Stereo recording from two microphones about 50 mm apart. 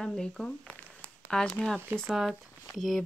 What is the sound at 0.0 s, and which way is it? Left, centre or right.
Speech, centre.